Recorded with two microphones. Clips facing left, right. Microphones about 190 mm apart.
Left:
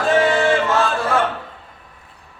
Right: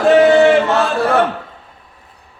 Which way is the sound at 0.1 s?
65° right (ahead or behind).